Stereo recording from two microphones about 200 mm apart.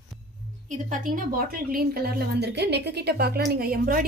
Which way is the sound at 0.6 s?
40° right (ahead or behind).